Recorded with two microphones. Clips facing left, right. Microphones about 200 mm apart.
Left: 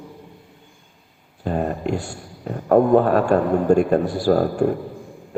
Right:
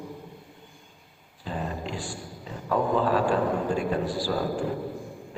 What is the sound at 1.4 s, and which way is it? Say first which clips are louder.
A man's voice: left 10 dB; 55° left (ahead or behind).